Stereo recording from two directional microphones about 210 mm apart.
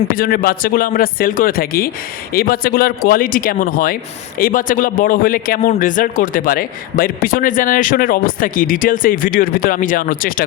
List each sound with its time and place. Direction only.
0.2 s a man's voice: 45° left (ahead or behind)